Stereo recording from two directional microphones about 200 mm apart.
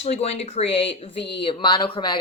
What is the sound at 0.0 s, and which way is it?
Speech, 30° left (ahead or behind).